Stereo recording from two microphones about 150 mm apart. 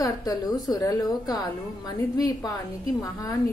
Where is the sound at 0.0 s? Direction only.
25° left (ahead or behind).